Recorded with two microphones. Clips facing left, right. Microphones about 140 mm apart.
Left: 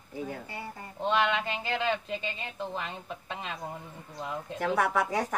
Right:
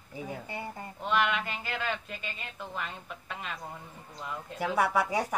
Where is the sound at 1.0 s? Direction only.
20° left (ahead or behind).